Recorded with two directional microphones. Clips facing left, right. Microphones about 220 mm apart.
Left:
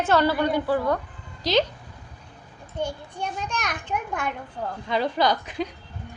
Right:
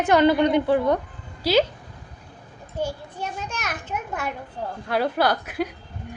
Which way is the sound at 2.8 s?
5° right (ahead or behind).